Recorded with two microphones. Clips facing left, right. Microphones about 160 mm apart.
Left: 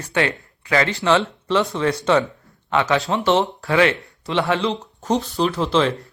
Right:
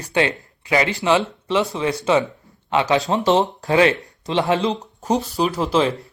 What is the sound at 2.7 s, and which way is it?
Speech, 20° right (ahead or behind).